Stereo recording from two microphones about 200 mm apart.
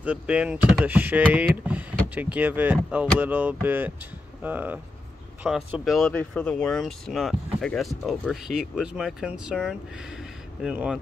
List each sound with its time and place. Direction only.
0.0 s speech: 5° right (ahead or behind)